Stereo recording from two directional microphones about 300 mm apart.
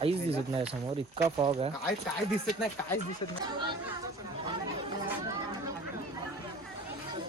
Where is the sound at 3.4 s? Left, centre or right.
Centre.